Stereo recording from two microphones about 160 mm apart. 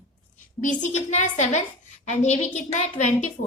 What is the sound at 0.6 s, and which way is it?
A woman's voice, 50° left (ahead or behind).